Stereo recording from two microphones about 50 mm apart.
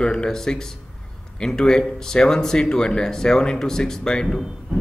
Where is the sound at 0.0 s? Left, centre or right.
Centre.